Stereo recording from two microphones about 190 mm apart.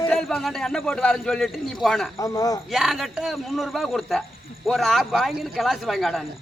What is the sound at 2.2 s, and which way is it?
Speech, 20° left (ahead or behind).